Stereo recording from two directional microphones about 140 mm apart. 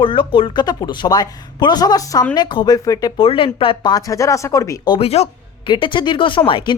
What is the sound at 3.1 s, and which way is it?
Speech, 40° left (ahead or behind).